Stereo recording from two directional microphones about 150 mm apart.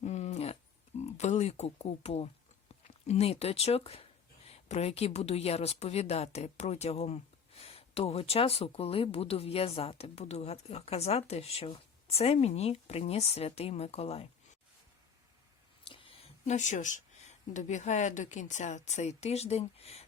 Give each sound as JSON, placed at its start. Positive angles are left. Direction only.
{"t": 0.0, "sound": "dog", "side_deg": 50}
{"t": 0.9, "sound": "speech", "side_deg": 50}
{"t": 15.9, "sound": "speech", "side_deg": 35}